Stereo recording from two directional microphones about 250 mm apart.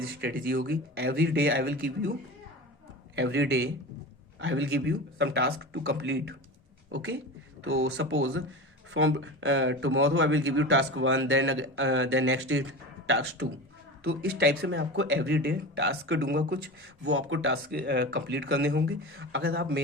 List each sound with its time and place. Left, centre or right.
0.2 s speech: right
3.2 s a man's voice: right
17.0 s a man's voice: right